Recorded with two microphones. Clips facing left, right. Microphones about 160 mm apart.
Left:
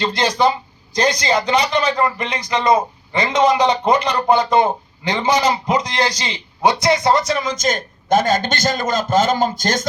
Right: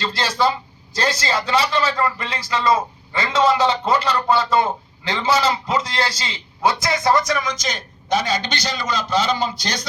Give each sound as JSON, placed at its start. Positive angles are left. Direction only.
{"t": 0.0, "sound": "a man's voice", "side_deg": 15}
{"t": 7.5, "sound": "a man's voice", "side_deg": 50}